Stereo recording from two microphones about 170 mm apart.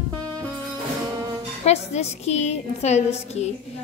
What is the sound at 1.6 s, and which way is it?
A woman's voice, 40° left (ahead or behind).